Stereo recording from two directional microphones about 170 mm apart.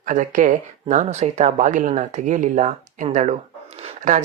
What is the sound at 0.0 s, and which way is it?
Speech, 50° right (ahead or behind).